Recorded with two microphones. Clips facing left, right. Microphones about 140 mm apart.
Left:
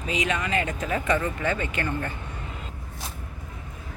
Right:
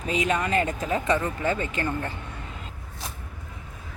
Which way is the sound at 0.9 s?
25° right (ahead or behind).